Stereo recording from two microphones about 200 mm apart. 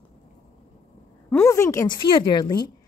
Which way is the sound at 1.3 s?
15° left (ahead or behind).